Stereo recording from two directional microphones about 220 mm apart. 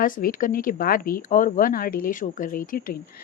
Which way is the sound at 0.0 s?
40° left (ahead or behind).